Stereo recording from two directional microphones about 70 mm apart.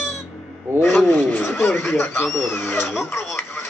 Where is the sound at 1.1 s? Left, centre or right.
Left.